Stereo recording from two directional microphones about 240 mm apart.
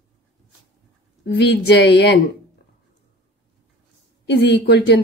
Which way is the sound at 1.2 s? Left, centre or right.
Left.